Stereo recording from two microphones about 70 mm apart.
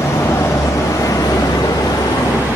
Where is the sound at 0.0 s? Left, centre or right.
Left.